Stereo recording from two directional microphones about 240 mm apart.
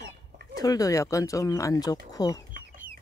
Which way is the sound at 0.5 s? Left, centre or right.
Centre.